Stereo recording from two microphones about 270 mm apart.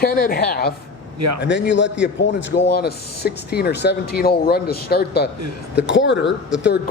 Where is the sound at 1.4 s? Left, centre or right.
Left.